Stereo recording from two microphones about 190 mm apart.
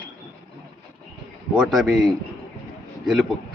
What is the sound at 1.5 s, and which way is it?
Speech, 5° right (ahead or behind).